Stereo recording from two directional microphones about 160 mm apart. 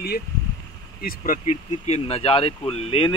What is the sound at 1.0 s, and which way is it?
Speech, 60° left (ahead or behind).